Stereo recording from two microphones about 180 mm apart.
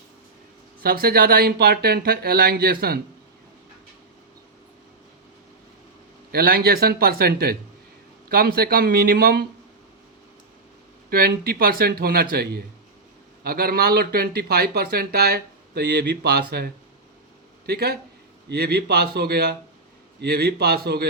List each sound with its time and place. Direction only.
0.8 s a man's voice: 55° right (ahead or behind)
6.3 s a man's voice: 60° right (ahead or behind)
11.1 s a man's voice: 60° right (ahead or behind)